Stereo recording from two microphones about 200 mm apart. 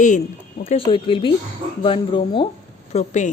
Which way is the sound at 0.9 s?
25° left (ahead or behind).